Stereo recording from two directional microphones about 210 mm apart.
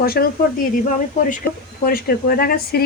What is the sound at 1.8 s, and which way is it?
A woman's voice, 45° left (ahead or behind).